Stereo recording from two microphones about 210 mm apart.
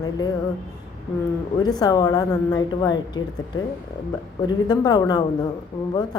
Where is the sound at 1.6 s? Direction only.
20° left (ahead or behind).